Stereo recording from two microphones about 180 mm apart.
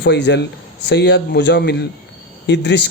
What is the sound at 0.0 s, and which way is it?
Speech, 70° left (ahead or behind).